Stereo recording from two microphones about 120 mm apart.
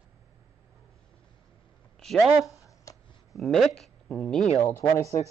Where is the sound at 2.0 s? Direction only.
Centre (ahead or behind).